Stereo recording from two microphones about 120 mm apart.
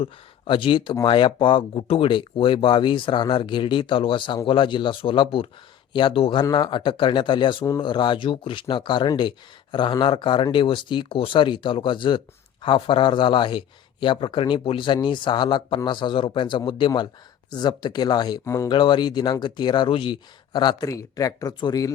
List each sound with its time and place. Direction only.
0.0 s speech: 45° left (ahead or behind); by 18.7 s 25° left (ahead or behind)
18.7 s speech: 40° left (ahead or behind)